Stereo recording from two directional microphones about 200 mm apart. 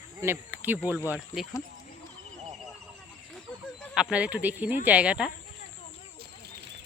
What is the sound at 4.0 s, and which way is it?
Speech, 5° right (ahead or behind).